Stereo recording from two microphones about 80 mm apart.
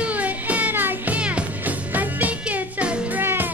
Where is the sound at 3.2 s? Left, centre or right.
Right.